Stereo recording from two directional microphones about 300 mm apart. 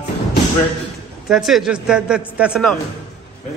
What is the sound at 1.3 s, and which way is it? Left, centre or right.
A man's voice, centre.